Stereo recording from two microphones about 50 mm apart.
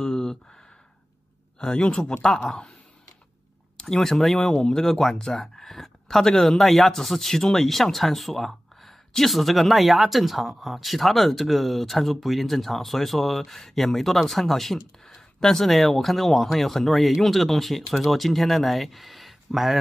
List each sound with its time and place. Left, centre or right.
0.0 s a sound: centre
1.6 s speech: centre
3.7 s speech: centre